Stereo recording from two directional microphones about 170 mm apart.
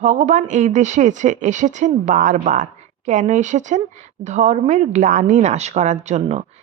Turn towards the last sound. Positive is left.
turn(degrees=-40)  # may be behind; listen again after turning